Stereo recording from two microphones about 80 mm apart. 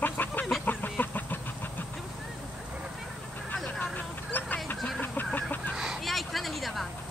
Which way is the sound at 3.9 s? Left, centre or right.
Left.